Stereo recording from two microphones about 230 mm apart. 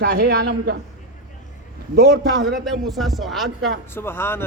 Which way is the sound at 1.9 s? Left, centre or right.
Right.